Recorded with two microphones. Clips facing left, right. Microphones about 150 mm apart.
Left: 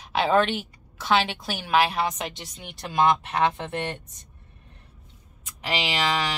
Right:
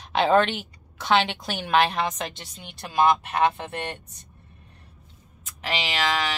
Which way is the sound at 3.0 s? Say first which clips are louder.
Right 1 dB; 10° right (ahead or behind).